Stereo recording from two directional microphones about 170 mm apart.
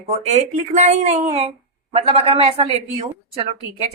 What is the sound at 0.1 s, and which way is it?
Speech, 40° right (ahead or behind).